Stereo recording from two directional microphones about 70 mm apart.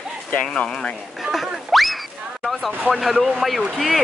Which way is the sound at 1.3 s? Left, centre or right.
Centre.